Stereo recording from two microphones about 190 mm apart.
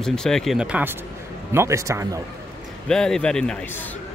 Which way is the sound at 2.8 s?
5° left (ahead or behind).